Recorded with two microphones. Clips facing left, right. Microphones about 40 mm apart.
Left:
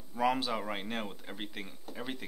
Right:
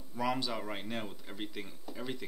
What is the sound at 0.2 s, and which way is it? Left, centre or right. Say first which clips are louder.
Speech: left 3 dB; left.